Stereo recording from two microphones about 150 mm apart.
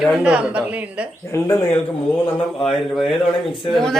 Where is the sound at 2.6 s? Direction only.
Centre (ahead or behind).